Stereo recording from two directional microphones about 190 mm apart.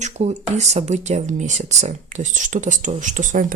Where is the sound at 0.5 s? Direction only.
35° right (ahead or behind).